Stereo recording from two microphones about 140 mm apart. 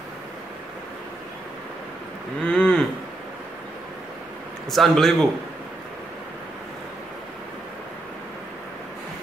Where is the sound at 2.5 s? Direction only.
5° left (ahead or behind).